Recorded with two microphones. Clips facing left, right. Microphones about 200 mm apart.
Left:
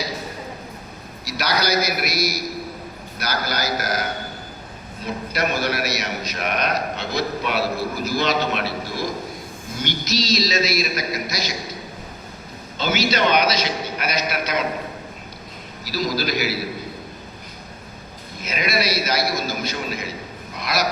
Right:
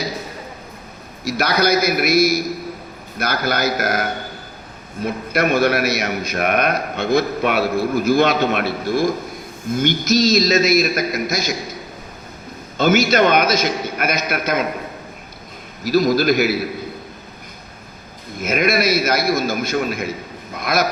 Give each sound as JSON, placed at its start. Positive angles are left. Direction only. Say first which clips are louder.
{"t": 1.2, "sound": "a man's voice", "louder": "right 6 dB", "side_deg": -50}
{"t": 12.7, "sound": "a man's voice", "louder": "right 7 dB", "side_deg": -50}
{"t": 15.8, "sound": "a man's voice", "louder": "right 9 dB", "side_deg": -50}
{"t": 18.4, "sound": "a man's voice", "louder": "right 6 dB", "side_deg": -50}
{"t": 20.6, "sound": "dog", "louder": "right 5 dB", "side_deg": -50}